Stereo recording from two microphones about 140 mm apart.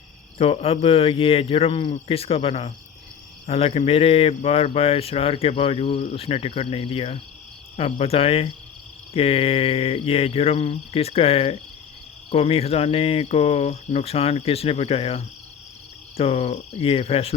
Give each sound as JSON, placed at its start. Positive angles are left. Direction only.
{"t": 0.3, "sound": "speech", "side_deg": 45}